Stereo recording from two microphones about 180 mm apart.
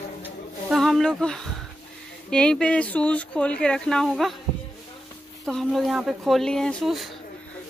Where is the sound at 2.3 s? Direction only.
5° left (ahead or behind).